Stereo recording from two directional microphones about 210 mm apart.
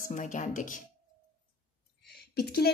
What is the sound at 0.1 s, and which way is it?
Speech, 35° left (ahead or behind).